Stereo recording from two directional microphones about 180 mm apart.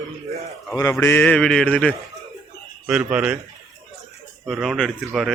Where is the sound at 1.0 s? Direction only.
10° left (ahead or behind).